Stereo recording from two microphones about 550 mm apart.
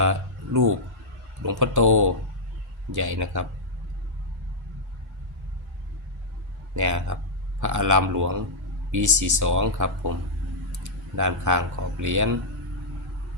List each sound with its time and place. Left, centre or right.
0.0 s a sound: right
1.5 s speech: right
6.7 s speech: right